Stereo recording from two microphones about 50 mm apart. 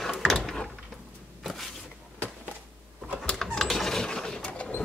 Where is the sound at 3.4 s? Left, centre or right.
Centre.